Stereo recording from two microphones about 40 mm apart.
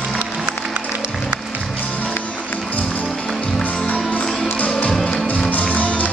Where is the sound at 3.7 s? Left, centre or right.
Left.